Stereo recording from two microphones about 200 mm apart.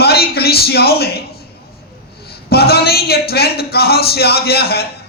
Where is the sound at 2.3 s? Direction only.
50° left (ahead or behind).